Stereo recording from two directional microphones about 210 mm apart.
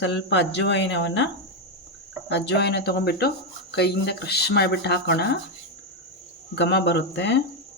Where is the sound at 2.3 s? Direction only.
55° left (ahead or behind).